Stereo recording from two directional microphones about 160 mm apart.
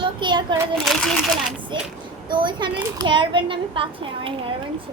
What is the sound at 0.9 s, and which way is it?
Speech, centre (ahead or behind).